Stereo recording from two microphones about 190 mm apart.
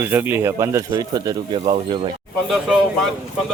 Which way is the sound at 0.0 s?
10° right (ahead or behind).